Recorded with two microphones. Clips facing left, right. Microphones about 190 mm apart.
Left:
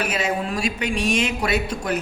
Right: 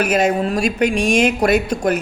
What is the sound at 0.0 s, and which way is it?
Speech, 45° right (ahead or behind).